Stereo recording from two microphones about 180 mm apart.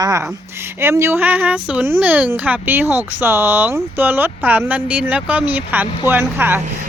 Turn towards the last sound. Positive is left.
turn(degrees=-10)  # may be behind; listen again after turning